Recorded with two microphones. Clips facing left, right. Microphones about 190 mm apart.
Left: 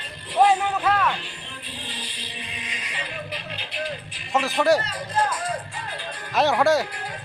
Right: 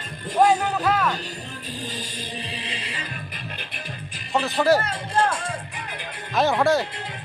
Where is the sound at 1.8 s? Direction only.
45° right (ahead or behind).